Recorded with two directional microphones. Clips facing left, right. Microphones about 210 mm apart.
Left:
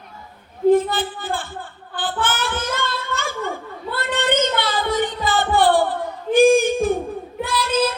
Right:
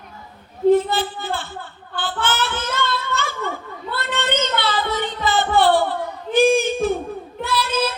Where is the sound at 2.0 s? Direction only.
50° left (ahead or behind).